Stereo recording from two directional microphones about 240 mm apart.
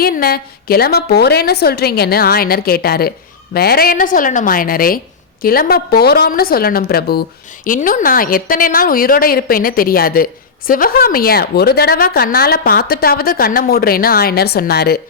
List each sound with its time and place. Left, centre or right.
0.0 s a woman's voice: left